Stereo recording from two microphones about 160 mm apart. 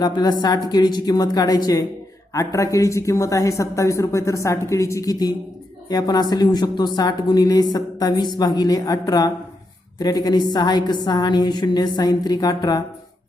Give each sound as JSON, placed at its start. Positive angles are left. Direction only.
{"t": 0.0, "sound": "speech", "side_deg": 25}